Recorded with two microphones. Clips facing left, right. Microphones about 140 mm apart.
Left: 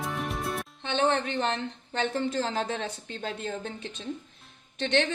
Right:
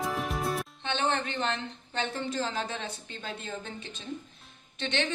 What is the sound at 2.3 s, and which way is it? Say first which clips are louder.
A woman's voice: left 3 dB; 65° left (ahead or behind).